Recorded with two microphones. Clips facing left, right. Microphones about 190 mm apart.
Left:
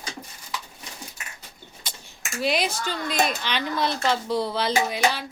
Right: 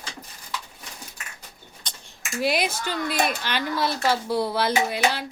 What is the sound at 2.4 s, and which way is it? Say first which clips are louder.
Speech: right 1 dB; 10° right (ahead or behind).